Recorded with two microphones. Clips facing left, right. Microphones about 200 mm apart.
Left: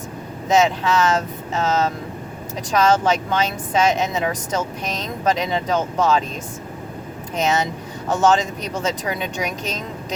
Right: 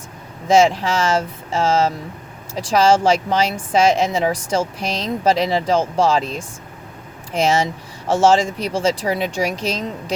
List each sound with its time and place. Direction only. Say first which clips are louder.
0.4 s speech: right 3 dB; 30° right (ahead or behind)